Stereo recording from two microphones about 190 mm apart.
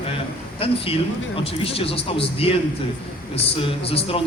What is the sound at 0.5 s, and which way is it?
A man's voice, 30° left (ahead or behind).